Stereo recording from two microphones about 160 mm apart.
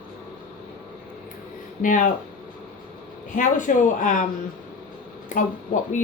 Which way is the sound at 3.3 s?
55° left (ahead or behind).